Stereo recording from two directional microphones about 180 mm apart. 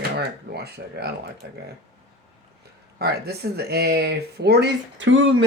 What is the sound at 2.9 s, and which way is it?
Speech, 60° right (ahead or behind).